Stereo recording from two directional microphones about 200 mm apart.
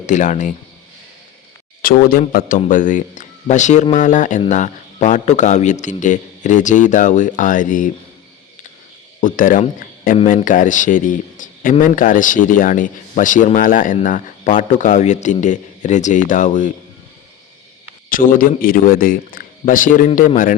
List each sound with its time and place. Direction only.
0.0 s a man's voice: 40° left (ahead or behind)
1.8 s a man's voice: 45° left (ahead or behind)
9.2 s a man's voice: 40° left (ahead or behind)
18.1 s a man's voice: 45° left (ahead or behind)